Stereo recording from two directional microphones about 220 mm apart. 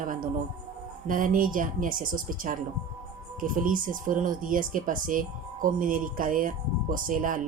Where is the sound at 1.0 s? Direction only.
40° right (ahead or behind).